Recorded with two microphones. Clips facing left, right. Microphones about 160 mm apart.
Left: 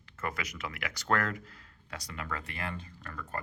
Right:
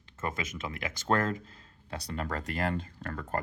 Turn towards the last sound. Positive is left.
turn(degrees=-50)  # may be behind; listen again after turning